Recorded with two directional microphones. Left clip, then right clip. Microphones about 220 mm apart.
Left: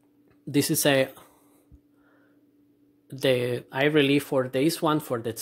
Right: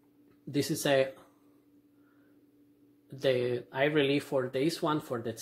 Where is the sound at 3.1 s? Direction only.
50° left (ahead or behind).